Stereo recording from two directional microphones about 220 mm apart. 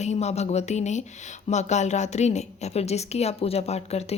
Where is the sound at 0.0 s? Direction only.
30° left (ahead or behind).